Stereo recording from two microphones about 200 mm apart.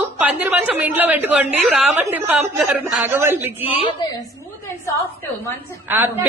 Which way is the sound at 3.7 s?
25° left (ahead or behind).